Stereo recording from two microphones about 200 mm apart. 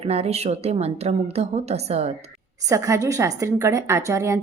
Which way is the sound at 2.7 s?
15° right (ahead or behind).